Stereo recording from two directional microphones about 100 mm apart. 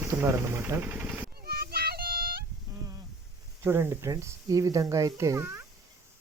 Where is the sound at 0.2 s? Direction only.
30° right (ahead or behind).